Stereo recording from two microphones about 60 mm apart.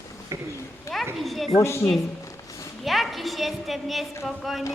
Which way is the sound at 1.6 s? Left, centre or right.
Left.